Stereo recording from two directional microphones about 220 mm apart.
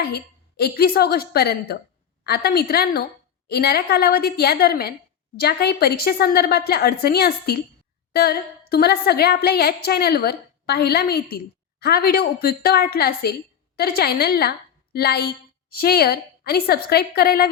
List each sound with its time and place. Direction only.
0.0 s a woman's voice: 45° left (ahead or behind)